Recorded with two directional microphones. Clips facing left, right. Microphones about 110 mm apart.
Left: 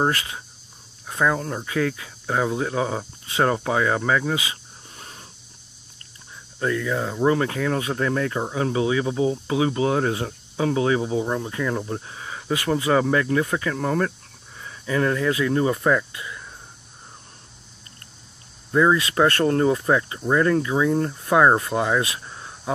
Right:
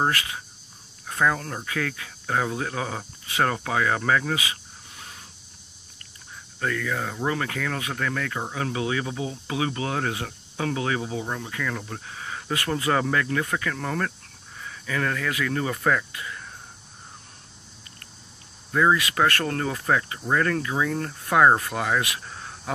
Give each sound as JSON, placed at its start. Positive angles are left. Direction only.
{"t": 1.0, "sound": "speech", "side_deg": 15}
{"t": 4.9, "sound": "a sound", "side_deg": 35}
{"t": 6.6, "sound": "speech", "side_deg": 20}
{"t": 18.7, "sound": "speech", "side_deg": 20}